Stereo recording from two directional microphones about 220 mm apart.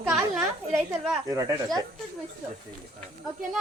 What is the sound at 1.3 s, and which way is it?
Speech, 15° right (ahead or behind).